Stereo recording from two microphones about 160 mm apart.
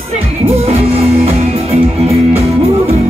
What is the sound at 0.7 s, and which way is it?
Music, 40° right (ahead or behind).